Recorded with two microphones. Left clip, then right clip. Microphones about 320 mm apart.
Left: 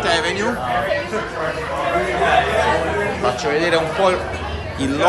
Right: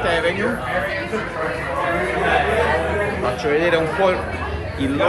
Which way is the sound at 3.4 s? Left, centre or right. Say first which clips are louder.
Right 2 dB; centre.